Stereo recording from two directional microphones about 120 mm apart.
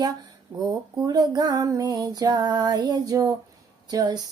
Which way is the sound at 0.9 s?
35° right (ahead or behind).